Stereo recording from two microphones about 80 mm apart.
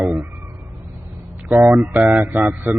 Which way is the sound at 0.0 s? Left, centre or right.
Centre.